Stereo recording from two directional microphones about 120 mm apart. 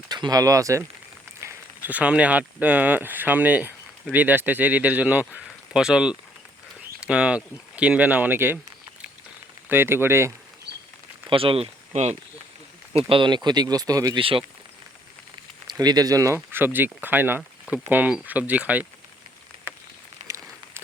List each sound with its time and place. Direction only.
0.1 s speech: 35° right (ahead or behind); by 8.5 s 15° right (ahead or behind)
9.6 s speech: 20° right (ahead or behind)
11.3 s speech: 50° right (ahead or behind); by 12.1 s 65° right (ahead or behind)
12.9 s speech: 50° right (ahead or behind); by 14.2 s 30° right (ahead or behind)
14.2 s speech: 45° right (ahead or behind)
15.6 s speech: 35° right (ahead or behind); by 18.9 s 10° right (ahead or behind)
20.2 s a sound: 25° right (ahead or behind)